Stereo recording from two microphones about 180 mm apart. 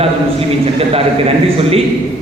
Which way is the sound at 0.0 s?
35° right (ahead or behind).